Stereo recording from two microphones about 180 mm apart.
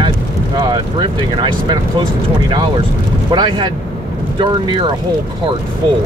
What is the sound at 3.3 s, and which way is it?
Speech, 25° right (ahead or behind).